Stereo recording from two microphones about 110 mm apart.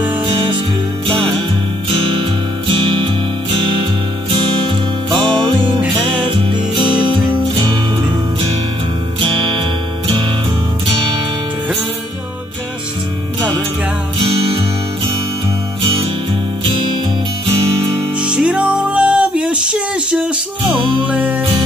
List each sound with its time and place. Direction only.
2.7 s music: 45° right (ahead or behind)
5.1 s music: 45° right (ahead or behind)
18.2 s music: 10° right (ahead or behind)